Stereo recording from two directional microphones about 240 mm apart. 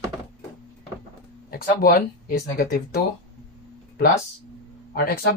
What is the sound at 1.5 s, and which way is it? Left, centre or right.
Speech, left.